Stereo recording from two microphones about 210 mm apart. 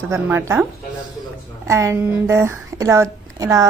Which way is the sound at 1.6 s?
15° right (ahead or behind).